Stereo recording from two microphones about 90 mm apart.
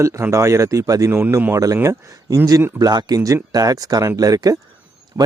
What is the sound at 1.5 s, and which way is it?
Speech, 40° right (ahead or behind).